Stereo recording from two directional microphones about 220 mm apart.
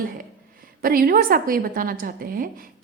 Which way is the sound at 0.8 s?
40° right (ahead or behind).